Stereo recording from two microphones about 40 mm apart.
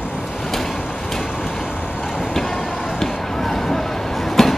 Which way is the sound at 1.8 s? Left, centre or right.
Left.